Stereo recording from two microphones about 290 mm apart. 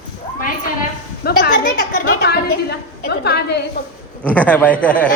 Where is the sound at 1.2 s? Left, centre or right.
Left.